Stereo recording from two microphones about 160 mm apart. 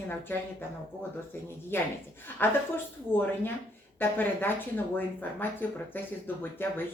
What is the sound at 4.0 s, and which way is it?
Speech, 10° left (ahead or behind).